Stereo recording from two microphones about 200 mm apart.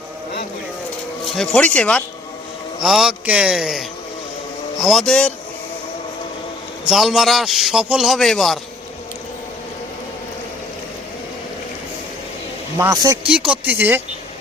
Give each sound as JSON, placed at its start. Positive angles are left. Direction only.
{"t": 1.3, "sound": "a man's voice", "side_deg": 5}
{"t": 6.8, "sound": "a man's voice", "side_deg": 0}
{"t": 12.7, "sound": "speech", "side_deg": -15}